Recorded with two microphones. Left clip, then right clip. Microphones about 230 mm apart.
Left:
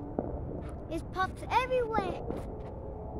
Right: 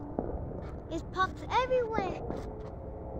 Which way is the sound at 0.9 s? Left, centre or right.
Left.